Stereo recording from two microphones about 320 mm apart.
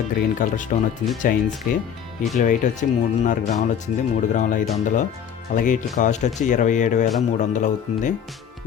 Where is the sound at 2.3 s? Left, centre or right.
Left.